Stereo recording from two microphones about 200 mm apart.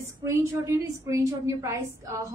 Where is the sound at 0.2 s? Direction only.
15° right (ahead or behind).